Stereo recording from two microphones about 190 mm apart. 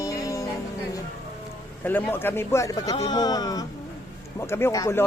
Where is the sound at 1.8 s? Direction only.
10° left (ahead or behind).